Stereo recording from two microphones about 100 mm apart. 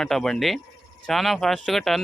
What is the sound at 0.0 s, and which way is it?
Speech, 5° left (ahead or behind).